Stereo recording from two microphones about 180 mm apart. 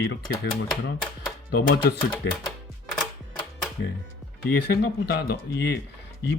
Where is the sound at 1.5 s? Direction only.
60° left (ahead or behind).